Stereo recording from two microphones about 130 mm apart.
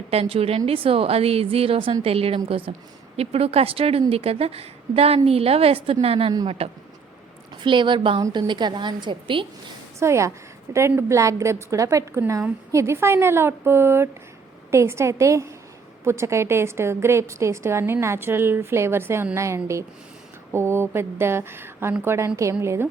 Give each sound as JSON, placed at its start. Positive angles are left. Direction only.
{"t": 0.1, "sound": "a woman's voice", "side_deg": -50}
{"t": 7.6, "sound": "a woman's voice", "side_deg": -40}
{"t": 10.0, "sound": "a woman's voice", "side_deg": -20}